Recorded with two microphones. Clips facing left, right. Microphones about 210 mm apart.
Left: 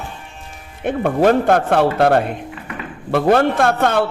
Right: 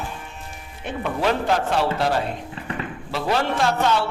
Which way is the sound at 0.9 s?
50° left (ahead or behind).